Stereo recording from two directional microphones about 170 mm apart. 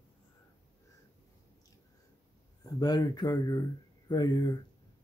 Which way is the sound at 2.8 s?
25° left (ahead or behind).